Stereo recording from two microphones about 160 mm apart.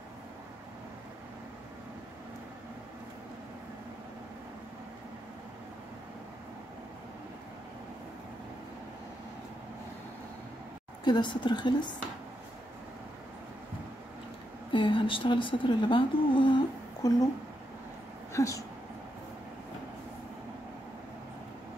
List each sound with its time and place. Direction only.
11.1 s a woman's voice: 30° left (ahead or behind)
14.7 s a woman's voice: 30° left (ahead or behind)
18.3 s speech: 20° left (ahead or behind)